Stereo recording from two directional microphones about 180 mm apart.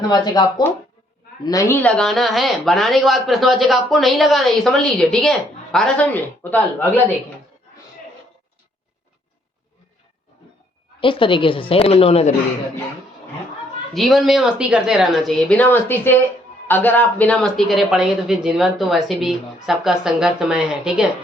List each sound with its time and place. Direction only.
0.1 s a woman's voice: 25° left (ahead or behind)
11.0 s a woman's voice: 30° left (ahead or behind)
13.9 s speech: centre (ahead or behind)